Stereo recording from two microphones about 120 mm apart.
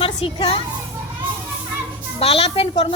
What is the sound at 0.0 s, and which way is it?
Speech, 50° left (ahead or behind).